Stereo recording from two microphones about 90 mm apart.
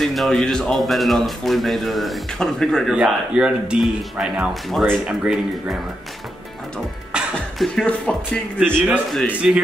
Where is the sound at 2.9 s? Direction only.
10° right (ahead or behind).